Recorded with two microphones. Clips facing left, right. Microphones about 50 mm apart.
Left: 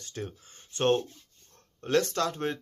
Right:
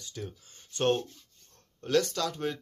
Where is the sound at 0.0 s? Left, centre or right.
Left.